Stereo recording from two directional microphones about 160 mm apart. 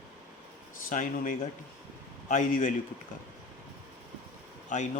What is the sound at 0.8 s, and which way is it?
A man's voice, 55° left (ahead or behind).